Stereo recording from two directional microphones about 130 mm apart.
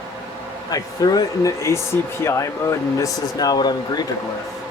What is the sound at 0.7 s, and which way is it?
Speech, 30° left (ahead or behind).